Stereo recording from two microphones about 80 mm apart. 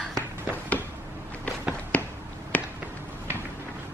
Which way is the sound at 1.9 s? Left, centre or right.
Centre.